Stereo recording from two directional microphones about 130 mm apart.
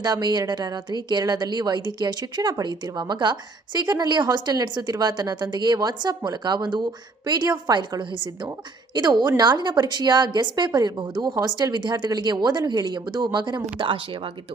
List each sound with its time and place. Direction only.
0.0 s a woman's voice: 35° right (ahead or behind)